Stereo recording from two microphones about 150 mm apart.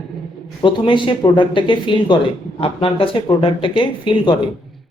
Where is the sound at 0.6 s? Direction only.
35° left (ahead or behind).